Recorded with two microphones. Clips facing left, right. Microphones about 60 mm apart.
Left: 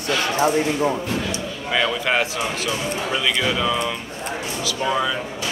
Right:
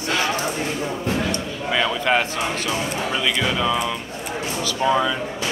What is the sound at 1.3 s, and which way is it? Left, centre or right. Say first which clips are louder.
Speech: right 1 dB; centre.